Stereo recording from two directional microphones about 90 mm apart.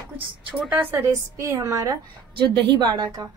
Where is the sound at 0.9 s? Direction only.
35° right (ahead or behind).